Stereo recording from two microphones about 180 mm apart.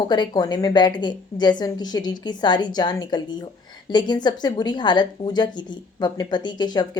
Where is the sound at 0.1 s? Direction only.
25° left (ahead or behind).